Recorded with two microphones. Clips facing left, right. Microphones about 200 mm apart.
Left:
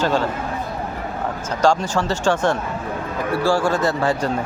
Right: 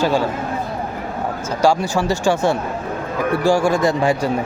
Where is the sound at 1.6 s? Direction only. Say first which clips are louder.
Right 1 dB; 10° right (ahead or behind).